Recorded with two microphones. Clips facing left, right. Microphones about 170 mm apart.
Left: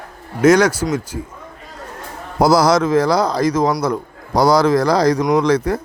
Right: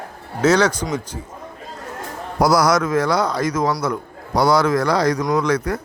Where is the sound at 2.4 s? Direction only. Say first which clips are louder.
Left 3 dB; 25° left (ahead or behind).